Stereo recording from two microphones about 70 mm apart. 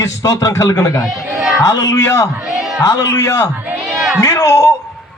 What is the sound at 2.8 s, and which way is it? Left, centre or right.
Speech, left.